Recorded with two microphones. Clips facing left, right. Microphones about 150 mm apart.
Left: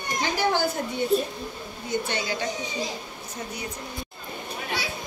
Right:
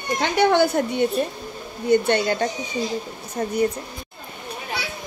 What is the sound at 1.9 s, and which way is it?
Speech, 60° right (ahead or behind).